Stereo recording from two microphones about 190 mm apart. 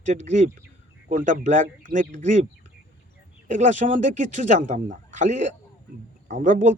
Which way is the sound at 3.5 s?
40° right (ahead or behind).